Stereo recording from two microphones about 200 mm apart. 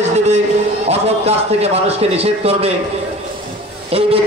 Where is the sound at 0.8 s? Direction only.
30° right (ahead or behind).